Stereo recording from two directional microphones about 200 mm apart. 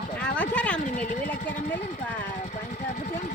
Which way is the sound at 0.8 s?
40° left (ahead or behind).